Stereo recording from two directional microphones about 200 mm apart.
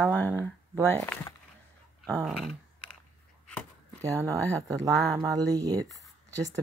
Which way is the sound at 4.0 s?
15° right (ahead or behind).